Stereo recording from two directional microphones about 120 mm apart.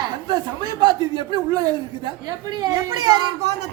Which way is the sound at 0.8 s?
35° right (ahead or behind).